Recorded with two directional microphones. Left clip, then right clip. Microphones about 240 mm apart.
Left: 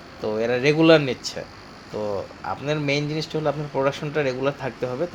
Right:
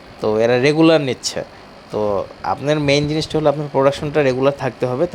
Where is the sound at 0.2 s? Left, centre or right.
Right.